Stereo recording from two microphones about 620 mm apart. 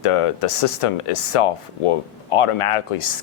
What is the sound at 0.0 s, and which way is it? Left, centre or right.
Speech, left.